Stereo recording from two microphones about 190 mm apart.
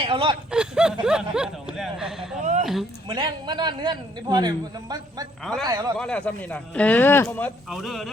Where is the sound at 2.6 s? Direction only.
Centre (ahead or behind).